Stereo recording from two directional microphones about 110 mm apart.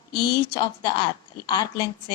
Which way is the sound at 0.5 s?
45° left (ahead or behind).